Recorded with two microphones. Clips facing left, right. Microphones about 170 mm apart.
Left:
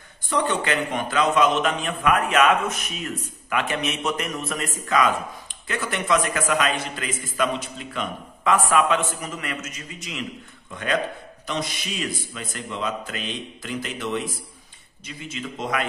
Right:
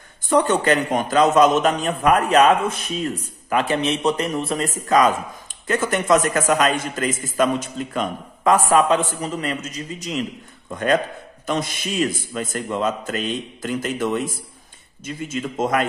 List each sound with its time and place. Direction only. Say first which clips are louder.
0.3 s a man's voice: right 6 dB; 45° right (ahead or behind)